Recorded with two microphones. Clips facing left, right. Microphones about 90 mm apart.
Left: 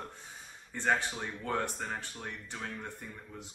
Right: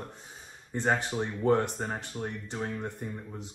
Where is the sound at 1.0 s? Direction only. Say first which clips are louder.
Right 10 dB; 35° right (ahead or behind).